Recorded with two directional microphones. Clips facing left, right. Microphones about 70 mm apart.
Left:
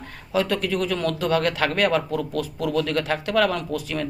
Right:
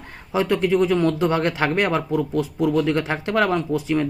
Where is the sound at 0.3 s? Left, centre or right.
Right.